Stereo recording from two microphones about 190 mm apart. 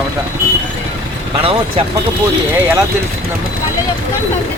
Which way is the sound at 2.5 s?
10° right (ahead or behind).